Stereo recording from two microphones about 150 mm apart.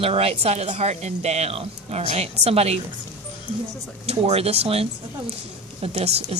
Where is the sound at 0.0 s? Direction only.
40° right (ahead or behind).